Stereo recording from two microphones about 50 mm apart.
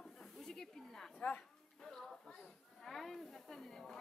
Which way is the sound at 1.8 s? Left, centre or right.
Centre.